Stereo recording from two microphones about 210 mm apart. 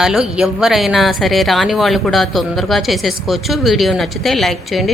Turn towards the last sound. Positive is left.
turn(degrees=0)  # may be behind; listen again after turning